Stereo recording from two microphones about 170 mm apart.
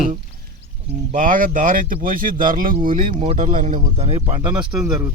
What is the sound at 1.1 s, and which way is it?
Speech, 55° right (ahead or behind).